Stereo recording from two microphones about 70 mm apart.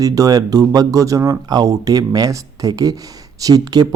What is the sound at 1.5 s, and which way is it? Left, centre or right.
Speech, right.